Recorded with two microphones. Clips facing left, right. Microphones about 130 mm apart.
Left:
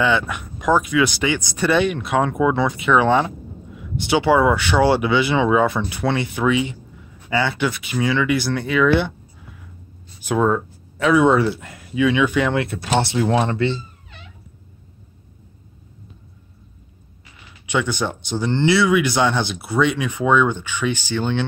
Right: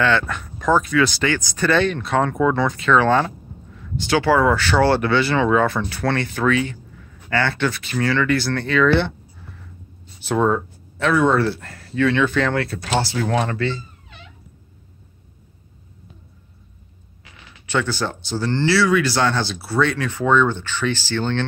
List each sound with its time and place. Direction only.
0.0 s speech: 15° left (ahead or behind)
17.6 s speech: 15° left (ahead or behind)